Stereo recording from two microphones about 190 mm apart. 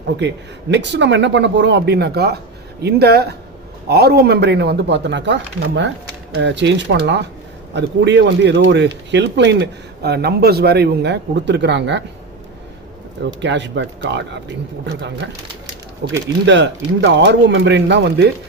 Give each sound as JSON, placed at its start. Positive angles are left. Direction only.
{"t": 0.7, "sound": "a man's voice", "side_deg": -65}
{"t": 13.4, "sound": "speech", "side_deg": -70}
{"t": 16.5, "sound": "speech", "side_deg": -65}